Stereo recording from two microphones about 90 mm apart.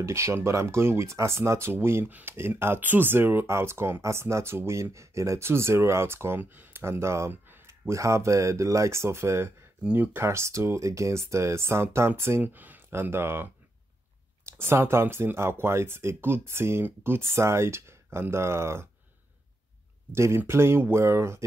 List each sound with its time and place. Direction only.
0.0 s speech: 30° right (ahead or behind)
20.1 s speech: 30° right (ahead or behind)